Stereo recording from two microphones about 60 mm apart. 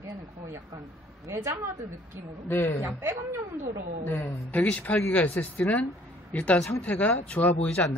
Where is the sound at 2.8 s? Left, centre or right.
Right.